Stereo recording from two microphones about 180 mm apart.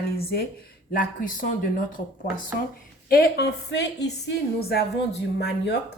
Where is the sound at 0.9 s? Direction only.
50° left (ahead or behind).